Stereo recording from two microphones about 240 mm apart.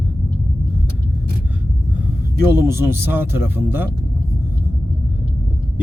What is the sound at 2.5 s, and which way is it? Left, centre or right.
Speech, centre.